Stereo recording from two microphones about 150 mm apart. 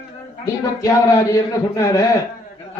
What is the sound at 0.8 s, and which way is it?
Speech, 20° left (ahead or behind).